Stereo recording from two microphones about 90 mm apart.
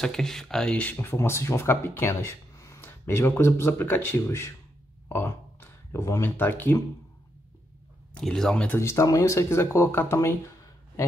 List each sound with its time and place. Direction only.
0.0 s speech: 5° left (ahead or behind)
1.1 s speech: 30° left (ahead or behind)
2.8 s speech: 25° left (ahead or behind)
5.0 s a sound: 25° left (ahead or behind)
5.9 s speech: 35° left (ahead or behind)
8.2 s speech: 5° left (ahead or behind)
8.7 s speech: 30° left (ahead or behind)